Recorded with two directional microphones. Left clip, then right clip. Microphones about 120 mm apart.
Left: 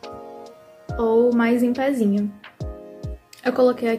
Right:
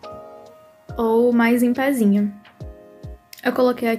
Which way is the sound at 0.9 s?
30° right (ahead or behind).